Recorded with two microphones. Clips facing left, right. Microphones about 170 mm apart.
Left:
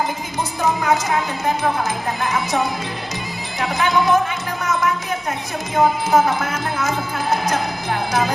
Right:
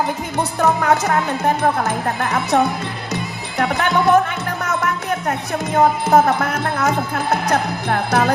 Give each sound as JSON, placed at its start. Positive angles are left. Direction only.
{"t": 0.3, "sound": "speech", "side_deg": -65}
{"t": 3.6, "sound": "speech", "side_deg": -65}
{"t": 4.6, "sound": "music", "side_deg": -65}
{"t": 5.7, "sound": "speech", "side_deg": -65}